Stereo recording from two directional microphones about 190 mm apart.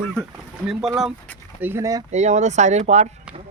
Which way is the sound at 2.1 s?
35° right (ahead or behind).